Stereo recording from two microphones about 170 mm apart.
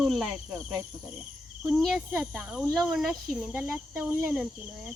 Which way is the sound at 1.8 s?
Centre (ahead or behind).